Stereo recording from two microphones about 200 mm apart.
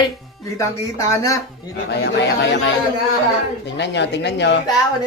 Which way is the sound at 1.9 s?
55° left (ahead or behind).